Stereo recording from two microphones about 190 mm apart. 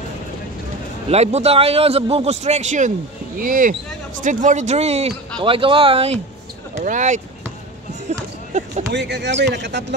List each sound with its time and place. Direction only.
1.1 s a man's voice: 35° right (ahead or behind)
8.1 s a sound: 35° right (ahead or behind)
8.9 s speech: 65° right (ahead or behind)